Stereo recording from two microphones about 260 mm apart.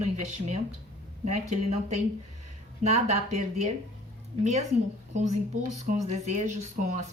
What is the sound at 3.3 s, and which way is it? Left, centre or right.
Speech, right.